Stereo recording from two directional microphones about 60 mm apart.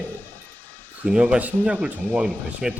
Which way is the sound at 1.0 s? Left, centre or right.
Centre.